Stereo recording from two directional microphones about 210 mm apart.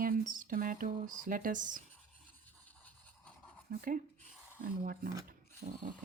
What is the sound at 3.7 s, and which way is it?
Speech, 40° right (ahead or behind).